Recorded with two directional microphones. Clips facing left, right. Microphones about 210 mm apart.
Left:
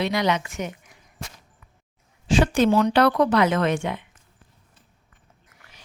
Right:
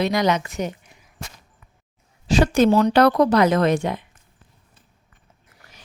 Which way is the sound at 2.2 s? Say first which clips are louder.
Right 2 dB; 40° right (ahead or behind).